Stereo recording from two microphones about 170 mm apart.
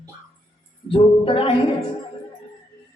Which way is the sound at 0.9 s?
30° left (ahead or behind).